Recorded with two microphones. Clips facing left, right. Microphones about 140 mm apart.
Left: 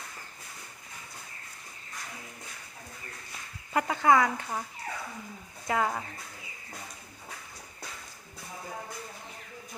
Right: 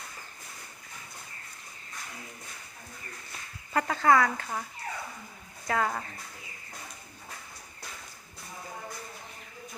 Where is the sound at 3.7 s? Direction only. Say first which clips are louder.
Even; 15° left (ahead or behind).